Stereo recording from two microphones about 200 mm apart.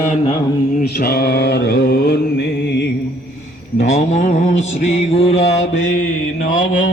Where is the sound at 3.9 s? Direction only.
35° left (ahead or behind).